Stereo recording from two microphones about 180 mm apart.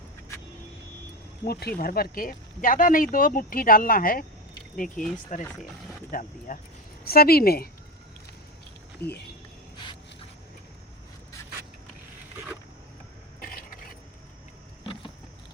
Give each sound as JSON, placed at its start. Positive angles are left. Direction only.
{"t": 1.5, "sound": "speech", "side_deg": 60}
{"t": 9.0, "sound": "speech", "side_deg": 65}